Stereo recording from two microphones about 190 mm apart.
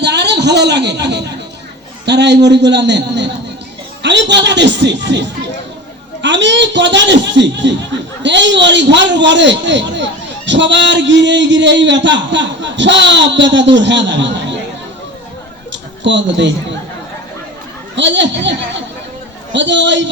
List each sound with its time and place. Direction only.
0.0 s a man's voice: 65° right (ahead or behind)
15.7 s a sound: 70° right (ahead or behind)
17.9 s a man's voice: 70° right (ahead or behind)
19.5 s a man's voice: 70° right (ahead or behind)